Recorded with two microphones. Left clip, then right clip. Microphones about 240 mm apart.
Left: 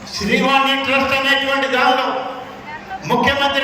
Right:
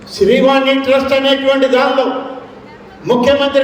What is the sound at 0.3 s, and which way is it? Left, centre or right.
A man's voice, right.